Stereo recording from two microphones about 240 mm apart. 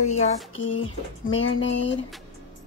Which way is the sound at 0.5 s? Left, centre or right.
Left.